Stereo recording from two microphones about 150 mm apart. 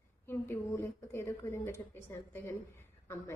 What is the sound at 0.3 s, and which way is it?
A woman's voice, 15° left (ahead or behind).